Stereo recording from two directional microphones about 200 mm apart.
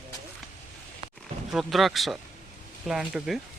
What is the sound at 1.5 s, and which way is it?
Speech, centre (ahead or behind).